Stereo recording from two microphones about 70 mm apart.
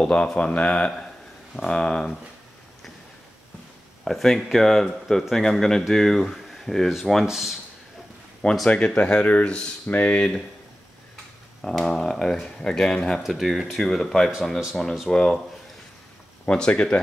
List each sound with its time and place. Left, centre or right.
0.1 s speech: centre
4.0 s speech: centre
8.6 s speech: centre
11.7 s speech: centre
16.4 s speech: centre